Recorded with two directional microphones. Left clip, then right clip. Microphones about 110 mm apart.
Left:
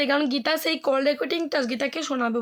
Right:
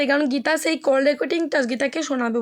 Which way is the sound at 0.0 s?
20° right (ahead or behind).